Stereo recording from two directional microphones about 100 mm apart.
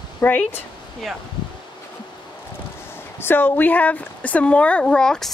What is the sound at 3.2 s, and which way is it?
Speech, 20° left (ahead or behind).